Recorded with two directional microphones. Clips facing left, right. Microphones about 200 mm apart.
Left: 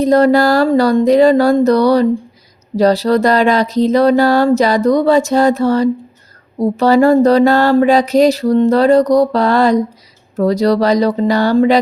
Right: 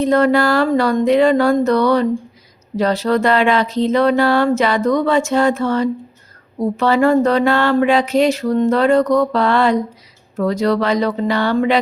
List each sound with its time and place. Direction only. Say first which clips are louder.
0.0 s speech: left 4 dB; 40° left (ahead or behind)